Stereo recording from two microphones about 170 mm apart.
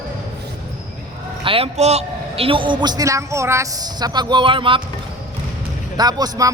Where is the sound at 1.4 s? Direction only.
35° right (ahead or behind).